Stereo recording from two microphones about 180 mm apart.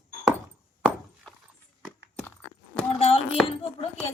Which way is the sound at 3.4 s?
35° left (ahead or behind).